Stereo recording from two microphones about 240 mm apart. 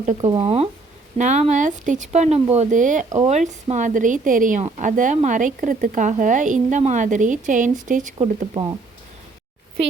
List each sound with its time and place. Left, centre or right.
0.0 s a woman's voice: right